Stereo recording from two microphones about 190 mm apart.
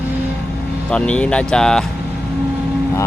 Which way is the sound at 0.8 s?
5° left (ahead or behind).